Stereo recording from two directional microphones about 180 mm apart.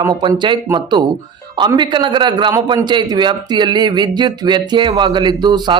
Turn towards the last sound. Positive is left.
turn(degrees=-25)  # may be behind; listen again after turning